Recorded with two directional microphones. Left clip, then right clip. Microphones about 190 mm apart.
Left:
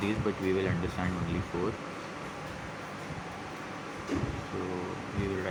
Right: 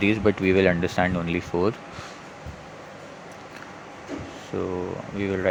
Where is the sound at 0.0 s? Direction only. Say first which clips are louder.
Right 10 dB; 50° right (ahead or behind).